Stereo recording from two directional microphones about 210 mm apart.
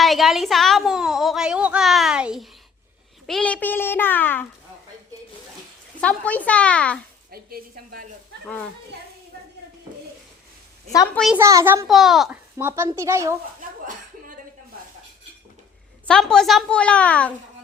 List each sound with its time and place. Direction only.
0.0 s a sound: centre (ahead or behind)
6.0 s a woman's voice: 5° left (ahead or behind)
7.3 s a woman's voice: 45° right (ahead or behind)
10.9 s a child's voice: 15° left (ahead or behind)
11.3 s a child's voice: 15° right (ahead or behind)
16.0 s a woman's voice: 5° left (ahead or behind)